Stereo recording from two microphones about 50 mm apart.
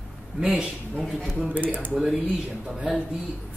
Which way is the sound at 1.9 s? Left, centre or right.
Centre.